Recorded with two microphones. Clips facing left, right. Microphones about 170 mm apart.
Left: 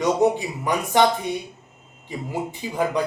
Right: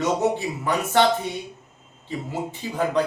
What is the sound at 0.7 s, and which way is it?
Speech, 15° left (ahead or behind).